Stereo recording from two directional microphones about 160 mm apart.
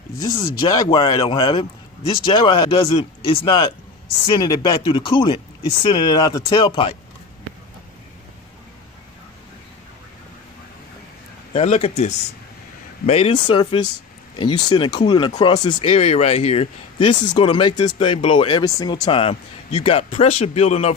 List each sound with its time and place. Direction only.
0.2 s speech: 25° left (ahead or behind)
11.5 s speech: 40° left (ahead or behind)
15.9 s speech: 40° left (ahead or behind)